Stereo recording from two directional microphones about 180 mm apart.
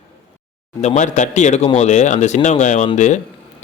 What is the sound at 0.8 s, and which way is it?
Speech, 40° left (ahead or behind).